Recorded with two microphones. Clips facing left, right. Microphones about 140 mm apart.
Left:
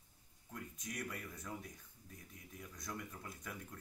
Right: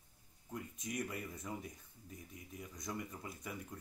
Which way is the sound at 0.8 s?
20° right (ahead or behind).